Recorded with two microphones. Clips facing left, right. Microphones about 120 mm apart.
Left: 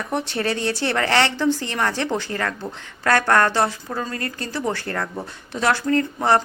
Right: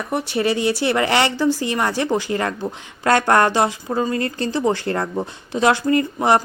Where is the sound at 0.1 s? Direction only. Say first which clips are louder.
Right 4 dB; 5° right (ahead or behind).